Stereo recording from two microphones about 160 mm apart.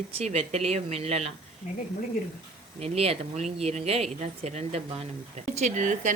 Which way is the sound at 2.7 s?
40° right (ahead or behind).